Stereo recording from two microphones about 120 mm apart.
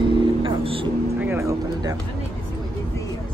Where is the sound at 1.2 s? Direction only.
25° right (ahead or behind).